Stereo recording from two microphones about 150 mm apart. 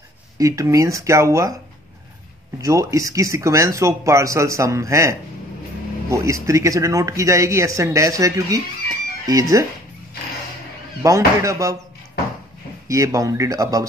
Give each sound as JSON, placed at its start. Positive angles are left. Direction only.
{"t": 0.4, "sound": "speech", "side_deg": -20}
{"t": 2.6, "sound": "speech", "side_deg": -20}
{"t": 11.0, "sound": "speech", "side_deg": -20}
{"t": 12.8, "sound": "speech", "side_deg": -20}